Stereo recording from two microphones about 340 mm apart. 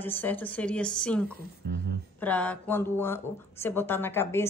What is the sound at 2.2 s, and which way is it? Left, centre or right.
Speech, centre.